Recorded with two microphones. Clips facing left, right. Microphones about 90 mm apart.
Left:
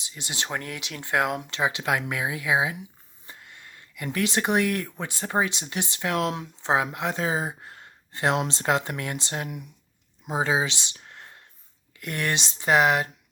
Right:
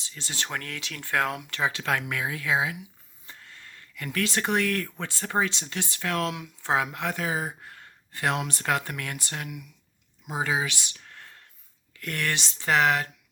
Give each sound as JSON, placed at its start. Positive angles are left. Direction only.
{"t": 0.0, "sound": "speech", "side_deg": 20}